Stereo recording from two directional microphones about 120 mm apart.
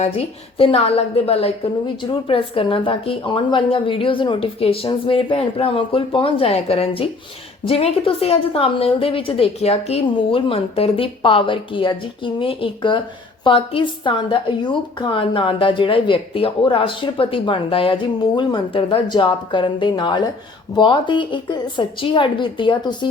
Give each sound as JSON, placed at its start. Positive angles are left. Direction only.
{"t": 0.0, "sound": "a woman's voice", "side_deg": 55}